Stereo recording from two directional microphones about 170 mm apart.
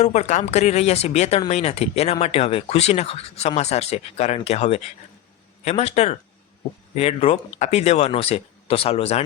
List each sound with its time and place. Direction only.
0.0 s speech: 40° left (ahead or behind)